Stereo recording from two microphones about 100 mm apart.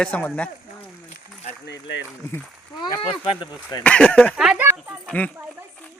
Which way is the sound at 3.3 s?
50° left (ahead or behind).